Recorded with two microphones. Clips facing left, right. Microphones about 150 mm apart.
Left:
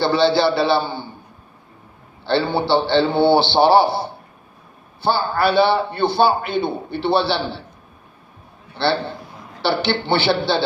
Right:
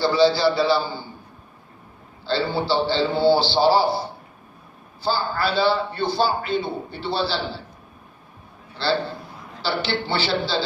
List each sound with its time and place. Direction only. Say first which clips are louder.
0.0 s a man's voice: left 1 dB; 65° left (ahead or behind)
2.2 s a man's voice: left 4 dB; 65° left (ahead or behind)
8.7 s a sound: left 3 dB; 65° left (ahead or behind)
9.6 s a man's voice: left 5 dB; 65° left (ahead or behind)